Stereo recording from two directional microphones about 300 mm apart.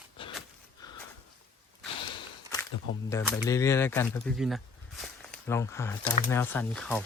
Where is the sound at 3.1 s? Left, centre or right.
Centre.